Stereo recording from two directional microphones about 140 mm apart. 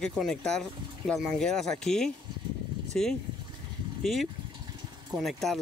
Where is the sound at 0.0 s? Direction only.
5° left (ahead or behind).